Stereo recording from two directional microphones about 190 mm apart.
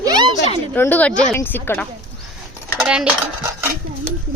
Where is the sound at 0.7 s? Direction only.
10° left (ahead or behind).